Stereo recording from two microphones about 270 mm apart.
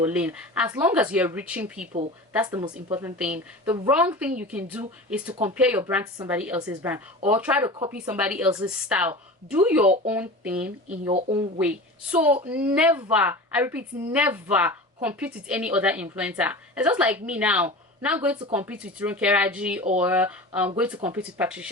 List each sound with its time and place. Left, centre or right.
0.0 s a woman's voice: centre
11.1 s speech: centre
11.6 s a woman's voice: centre